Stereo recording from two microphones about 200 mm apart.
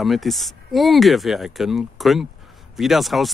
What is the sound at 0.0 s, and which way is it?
Speech, centre (ahead or behind).